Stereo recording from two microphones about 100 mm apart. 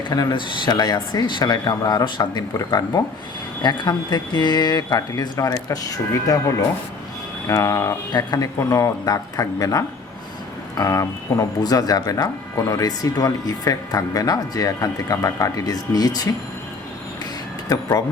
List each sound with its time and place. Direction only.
0.1 s speech: 45° left (ahead or behind)
7.4 s speech: 30° left (ahead or behind)
8.1 s speech: 45° left (ahead or behind)
8.5 s speech: 35° left (ahead or behind)
17.7 s speech: 40° left (ahead or behind)